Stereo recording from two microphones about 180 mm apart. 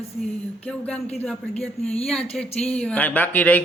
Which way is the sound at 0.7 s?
5° left (ahead or behind).